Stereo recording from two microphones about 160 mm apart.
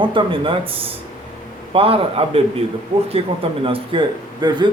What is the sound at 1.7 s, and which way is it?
Speech, 35° right (ahead or behind).